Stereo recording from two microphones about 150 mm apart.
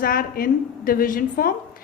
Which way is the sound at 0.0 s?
70° left (ahead or behind).